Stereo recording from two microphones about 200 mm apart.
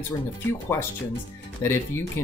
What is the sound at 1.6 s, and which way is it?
Speech, 15° left (ahead or behind).